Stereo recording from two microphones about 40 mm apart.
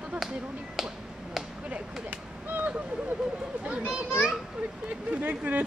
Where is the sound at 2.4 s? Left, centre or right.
Right.